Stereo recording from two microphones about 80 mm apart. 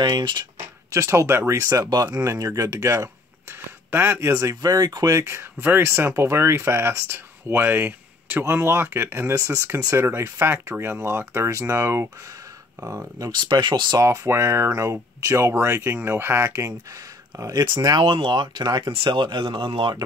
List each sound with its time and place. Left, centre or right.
0.0 s speech: right
0.9 s speech: right
4.3 s speech: right
5.1 s speech: right
13.3 s speech: right
13.9 s speech: right
18.0 s speech: right
19.0 s speech: right